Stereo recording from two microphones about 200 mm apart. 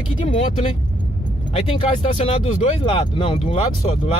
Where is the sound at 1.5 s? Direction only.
25° left (ahead or behind).